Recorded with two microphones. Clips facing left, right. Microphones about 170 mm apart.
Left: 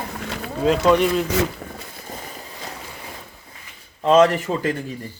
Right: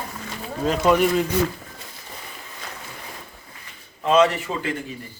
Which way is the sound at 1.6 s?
70° left (ahead or behind).